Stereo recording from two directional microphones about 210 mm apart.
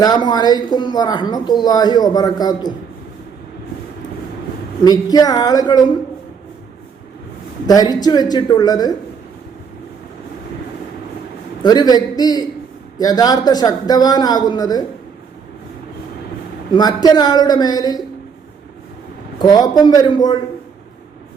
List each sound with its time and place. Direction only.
0.0 s speech: 20° left (ahead or behind)
4.8 s speech: 20° left (ahead or behind)
7.7 s speech: 20° left (ahead or behind)
11.6 s a man's voice: 20° left (ahead or behind)
16.7 s speech: 20° left (ahead or behind)
19.4 s speech: 15° left (ahead or behind)